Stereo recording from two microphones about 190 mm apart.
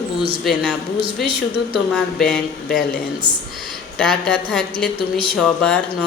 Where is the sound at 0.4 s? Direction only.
Centre (ahead or behind).